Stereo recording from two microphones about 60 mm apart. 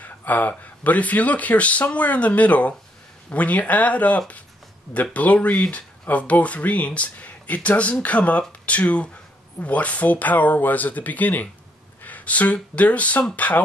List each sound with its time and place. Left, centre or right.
0.0 s speech: left